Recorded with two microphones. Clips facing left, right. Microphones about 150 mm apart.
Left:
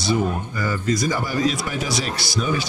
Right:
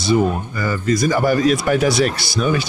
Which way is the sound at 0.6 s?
65° right (ahead or behind).